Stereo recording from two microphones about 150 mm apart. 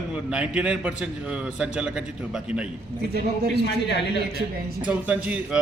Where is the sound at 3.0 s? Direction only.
90° right.